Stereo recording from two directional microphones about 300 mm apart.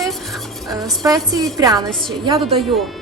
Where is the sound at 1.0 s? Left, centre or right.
Centre.